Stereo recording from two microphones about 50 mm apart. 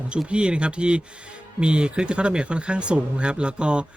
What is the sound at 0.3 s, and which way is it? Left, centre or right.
A man's voice, centre.